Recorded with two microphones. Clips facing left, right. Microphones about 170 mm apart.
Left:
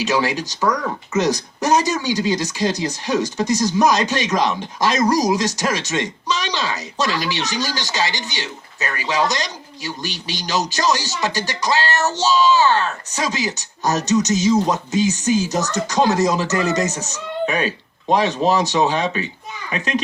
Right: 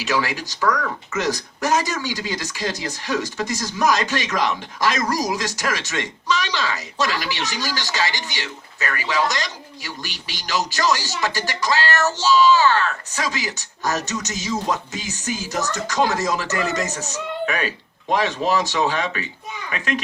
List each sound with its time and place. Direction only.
0.0 s speech: 20° left (ahead or behind)
16.5 s speech: 40° left (ahead or behind)
17.4 s speech: 20° left (ahead or behind)